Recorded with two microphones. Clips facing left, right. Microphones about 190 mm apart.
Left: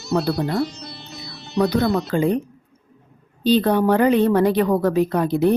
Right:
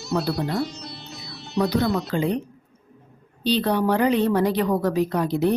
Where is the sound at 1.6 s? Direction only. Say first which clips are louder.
Left 3 dB; 55° left (ahead or behind).